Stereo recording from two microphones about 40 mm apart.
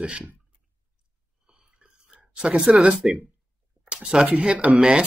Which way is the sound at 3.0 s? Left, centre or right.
Centre.